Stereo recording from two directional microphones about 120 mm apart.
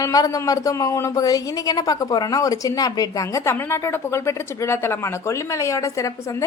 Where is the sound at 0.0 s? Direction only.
30° left (ahead or behind).